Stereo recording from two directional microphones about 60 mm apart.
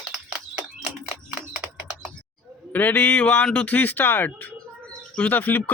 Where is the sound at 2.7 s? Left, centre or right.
Left.